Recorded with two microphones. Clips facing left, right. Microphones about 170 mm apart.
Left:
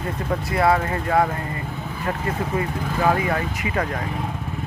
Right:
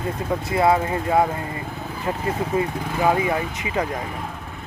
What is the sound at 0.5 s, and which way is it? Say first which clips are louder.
Speech: right 1 dB; 20° right (ahead or behind).